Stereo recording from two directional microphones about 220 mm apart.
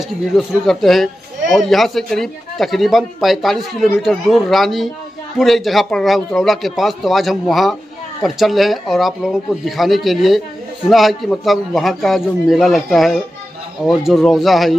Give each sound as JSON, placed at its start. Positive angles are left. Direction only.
{"t": 0.4, "sound": "speech", "side_deg": 0}